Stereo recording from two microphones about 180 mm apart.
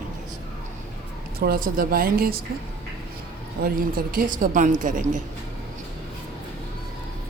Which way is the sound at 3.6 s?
55° right (ahead or behind).